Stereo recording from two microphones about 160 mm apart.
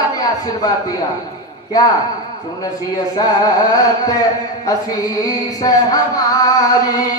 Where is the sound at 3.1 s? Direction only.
25° left (ahead or behind).